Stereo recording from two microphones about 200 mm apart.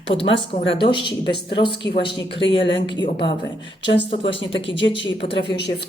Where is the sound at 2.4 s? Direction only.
65° left (ahead or behind).